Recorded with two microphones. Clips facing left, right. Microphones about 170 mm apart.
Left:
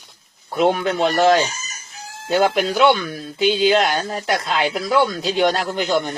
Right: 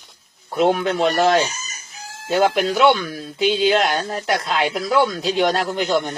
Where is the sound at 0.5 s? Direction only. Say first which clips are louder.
Even; centre (ahead or behind).